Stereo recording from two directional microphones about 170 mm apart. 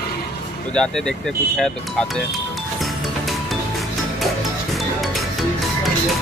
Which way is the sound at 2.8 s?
Centre (ahead or behind).